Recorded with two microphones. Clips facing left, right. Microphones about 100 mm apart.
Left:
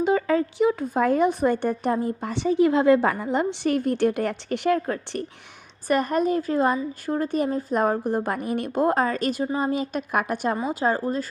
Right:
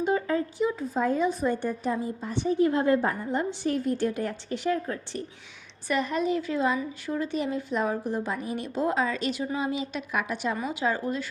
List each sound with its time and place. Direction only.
0.0 s speech: 90° left; by 5.2 s 70° left (ahead or behind)
5.9 s a woman's voice: 50° left (ahead or behind)